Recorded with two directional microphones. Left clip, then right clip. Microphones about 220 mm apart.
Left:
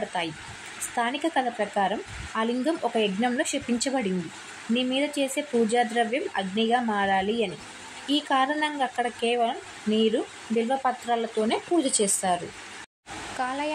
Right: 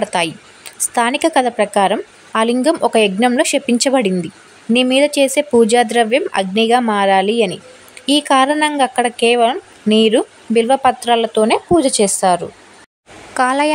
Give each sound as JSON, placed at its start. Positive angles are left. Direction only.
{"t": 0.1, "sound": "speech", "side_deg": -50}
{"t": 13.4, "sound": "speech", "side_deg": -50}